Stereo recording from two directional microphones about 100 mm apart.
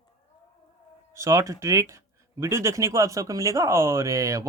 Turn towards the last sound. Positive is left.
turn(degrees=-30)  # may be behind; listen again after turning